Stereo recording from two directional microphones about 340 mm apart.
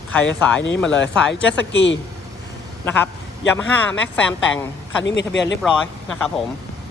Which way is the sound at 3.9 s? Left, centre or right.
Centre.